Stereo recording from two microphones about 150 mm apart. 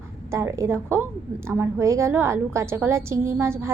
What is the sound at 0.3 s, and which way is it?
A woman's voice, 20° right (ahead or behind).